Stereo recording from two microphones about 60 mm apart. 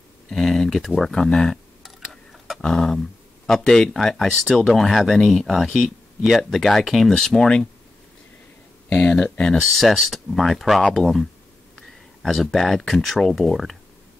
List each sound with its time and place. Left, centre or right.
0.3 s speech: centre
2.6 s speech: centre
7.2 s speech: centre
8.8 s speech: left; by 13.7 s centre